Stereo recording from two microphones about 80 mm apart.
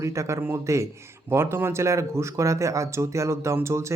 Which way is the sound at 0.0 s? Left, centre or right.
Right.